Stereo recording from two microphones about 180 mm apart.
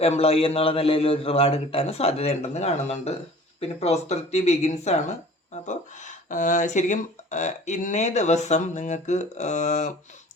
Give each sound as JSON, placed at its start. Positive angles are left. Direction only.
{"t": 0.0, "sound": "speech", "side_deg": 35}